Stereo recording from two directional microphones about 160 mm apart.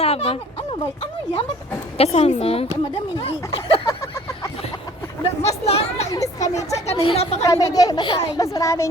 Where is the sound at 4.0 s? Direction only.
15° left (ahead or behind).